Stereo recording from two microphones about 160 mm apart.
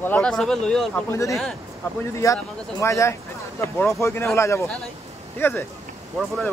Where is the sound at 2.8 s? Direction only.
20° left (ahead or behind).